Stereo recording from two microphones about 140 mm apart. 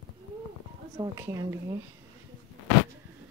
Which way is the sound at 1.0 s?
25° right (ahead or behind).